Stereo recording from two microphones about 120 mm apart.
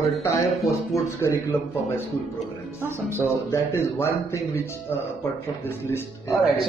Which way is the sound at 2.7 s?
20° right (ahead or behind).